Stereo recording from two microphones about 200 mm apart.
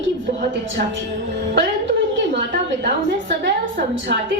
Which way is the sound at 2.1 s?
65° right (ahead or behind).